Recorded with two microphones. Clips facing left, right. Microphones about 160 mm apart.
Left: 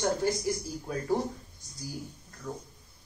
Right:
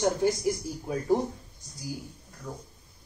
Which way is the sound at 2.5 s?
10° right (ahead or behind).